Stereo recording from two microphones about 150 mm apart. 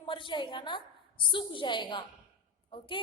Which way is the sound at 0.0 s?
35° left (ahead or behind).